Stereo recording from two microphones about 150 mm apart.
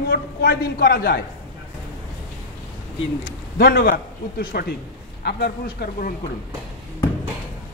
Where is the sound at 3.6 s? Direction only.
90° left.